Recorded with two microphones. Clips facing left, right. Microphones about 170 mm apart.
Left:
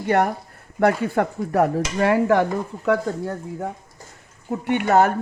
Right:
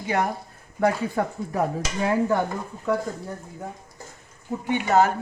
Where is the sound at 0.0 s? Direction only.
60° left (ahead or behind).